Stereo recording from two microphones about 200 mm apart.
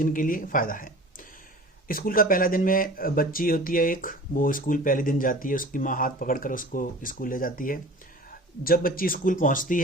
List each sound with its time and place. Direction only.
0.0 s speech: 40° left (ahead or behind)